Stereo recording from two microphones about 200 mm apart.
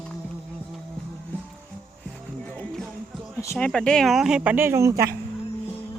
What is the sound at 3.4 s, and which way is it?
Speech, 15° left (ahead or behind).